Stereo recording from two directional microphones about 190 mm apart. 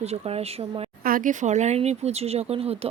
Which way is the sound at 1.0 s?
45° right (ahead or behind).